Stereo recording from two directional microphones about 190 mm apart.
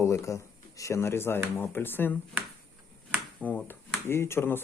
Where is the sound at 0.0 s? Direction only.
15° left (ahead or behind).